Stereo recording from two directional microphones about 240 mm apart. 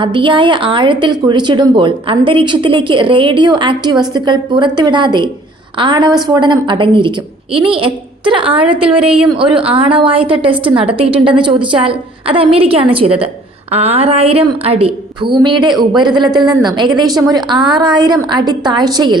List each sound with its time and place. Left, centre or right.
0.0 s a woman's voice: right